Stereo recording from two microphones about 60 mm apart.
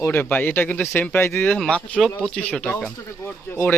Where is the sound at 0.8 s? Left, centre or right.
Left.